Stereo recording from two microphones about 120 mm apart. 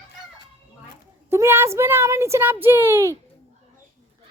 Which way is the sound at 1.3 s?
20° right (ahead or behind).